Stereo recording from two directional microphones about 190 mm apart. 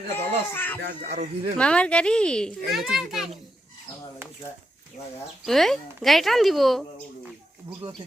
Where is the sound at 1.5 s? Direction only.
5° left (ahead or behind).